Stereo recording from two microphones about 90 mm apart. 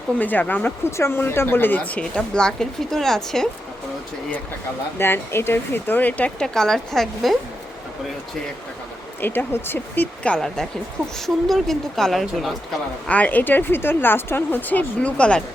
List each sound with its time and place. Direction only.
0.2 s speech: 20° left (ahead or behind)
0.9 s speech: 30° left (ahead or behind); by 3.5 s 5° left (ahead or behind)
4.9 s speech: 25° left (ahead or behind)
6.4 s speech: 5° left (ahead or behind)
9.2 s speech: 20° left (ahead or behind); by 12.5 s centre (ahead or behind)
13.1 s speech: 15° left (ahead or behind)